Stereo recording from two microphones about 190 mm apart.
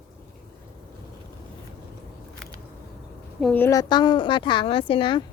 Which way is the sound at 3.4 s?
10° left (ahead or behind).